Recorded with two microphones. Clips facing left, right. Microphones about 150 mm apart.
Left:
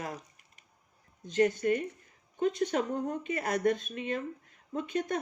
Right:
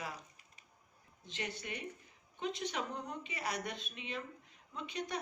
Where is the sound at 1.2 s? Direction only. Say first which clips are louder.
Left 17 dB; 45° left (ahead or behind).